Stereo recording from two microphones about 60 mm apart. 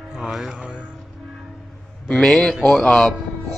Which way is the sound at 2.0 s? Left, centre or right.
Centre.